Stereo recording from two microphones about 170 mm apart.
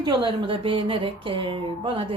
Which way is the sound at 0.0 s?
25° right (ahead or behind).